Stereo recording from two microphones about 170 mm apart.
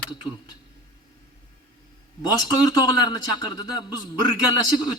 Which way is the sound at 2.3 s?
25° left (ahead or behind).